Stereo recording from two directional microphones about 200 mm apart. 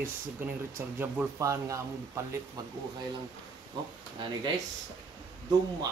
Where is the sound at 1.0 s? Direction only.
15° right (ahead or behind).